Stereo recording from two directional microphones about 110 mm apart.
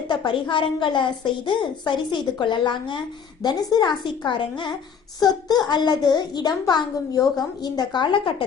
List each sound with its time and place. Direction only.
0.3 s a woman's voice: 50° left (ahead or behind)